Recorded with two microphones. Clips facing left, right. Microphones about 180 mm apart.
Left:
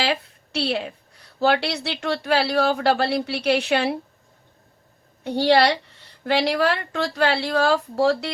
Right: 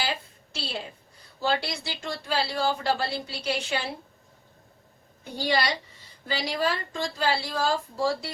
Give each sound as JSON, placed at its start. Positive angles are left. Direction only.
{"t": 0.0, "sound": "a woman's voice", "side_deg": 70}
{"t": 5.2, "sound": "a woman's voice", "side_deg": 65}